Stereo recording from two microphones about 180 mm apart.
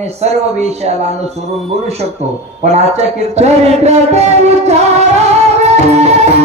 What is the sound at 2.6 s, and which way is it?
A man's voice, 35° right (ahead or behind).